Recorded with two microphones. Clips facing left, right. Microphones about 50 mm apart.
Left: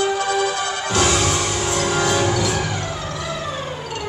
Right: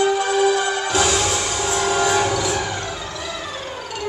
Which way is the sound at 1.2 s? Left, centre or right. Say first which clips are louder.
Left 1 dB; centre.